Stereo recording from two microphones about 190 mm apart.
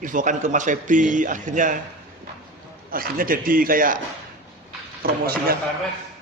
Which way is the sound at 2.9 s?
50° right (ahead or behind).